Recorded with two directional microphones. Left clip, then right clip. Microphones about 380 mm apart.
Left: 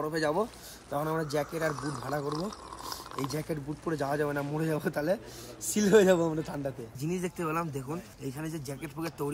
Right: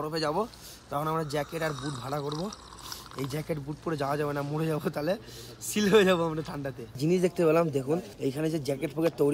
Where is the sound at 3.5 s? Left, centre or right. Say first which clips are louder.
Right 1 dB; centre.